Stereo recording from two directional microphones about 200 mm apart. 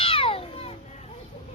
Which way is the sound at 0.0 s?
30° left (ahead or behind).